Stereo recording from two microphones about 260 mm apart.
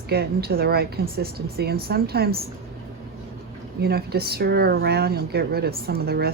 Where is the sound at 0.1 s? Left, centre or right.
Right.